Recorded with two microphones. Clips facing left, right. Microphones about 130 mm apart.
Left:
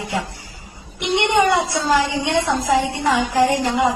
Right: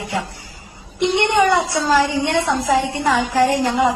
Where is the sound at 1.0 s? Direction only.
15° left (ahead or behind).